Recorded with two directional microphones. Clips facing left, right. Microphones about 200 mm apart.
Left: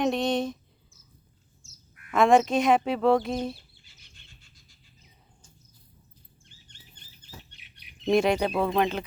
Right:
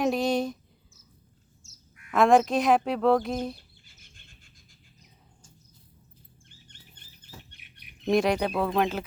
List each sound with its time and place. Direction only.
0.0 s speech: centre (ahead or behind)
2.0 s speech: centre (ahead or behind)
3.8 s a sound: 50° right (ahead or behind)
7.2 s bird: 50° right (ahead or behind)
8.1 s speech: centre (ahead or behind)